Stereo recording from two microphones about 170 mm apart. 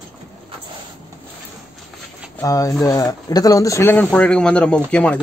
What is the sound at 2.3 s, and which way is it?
Speech, 20° left (ahead or behind).